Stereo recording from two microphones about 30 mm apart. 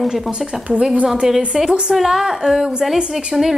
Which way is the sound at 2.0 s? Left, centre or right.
Centre.